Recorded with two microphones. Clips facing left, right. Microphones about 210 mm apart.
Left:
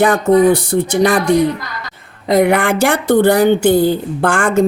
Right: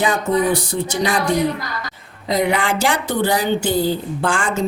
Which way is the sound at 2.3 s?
55° left (ahead or behind).